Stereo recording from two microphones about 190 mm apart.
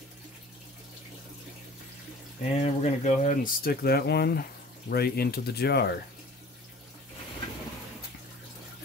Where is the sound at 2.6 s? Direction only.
35° left (ahead or behind); by 5.9 s 60° left (ahead or behind).